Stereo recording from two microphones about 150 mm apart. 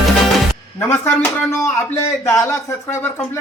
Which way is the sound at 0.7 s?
15° left (ahead or behind).